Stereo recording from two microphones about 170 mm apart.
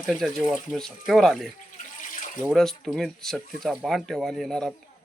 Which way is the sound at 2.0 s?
50° left (ahead or behind).